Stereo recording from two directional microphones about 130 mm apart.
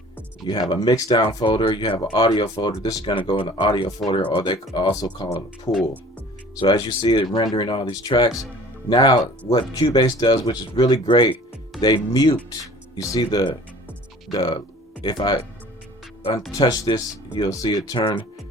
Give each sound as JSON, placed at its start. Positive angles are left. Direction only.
{"t": 0.4, "sound": "speech", "side_deg": 35}
{"t": 1.5, "sound": "speech", "side_deg": 35}
{"t": 4.2, "sound": "speech", "side_deg": 40}
{"t": 5.7, "sound": "speech", "side_deg": 25}
{"t": 6.6, "sound": "speech", "side_deg": 35}
{"t": 16.5, "sound": "speech", "side_deg": 30}